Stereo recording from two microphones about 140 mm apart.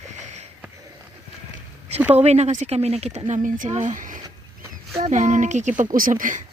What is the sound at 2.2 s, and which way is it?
Speech, 50° right (ahead or behind).